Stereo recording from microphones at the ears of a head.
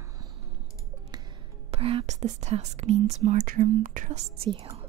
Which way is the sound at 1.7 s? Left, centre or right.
Right.